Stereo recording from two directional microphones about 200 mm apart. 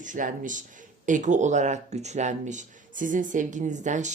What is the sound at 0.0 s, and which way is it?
Speech, 40° right (ahead or behind).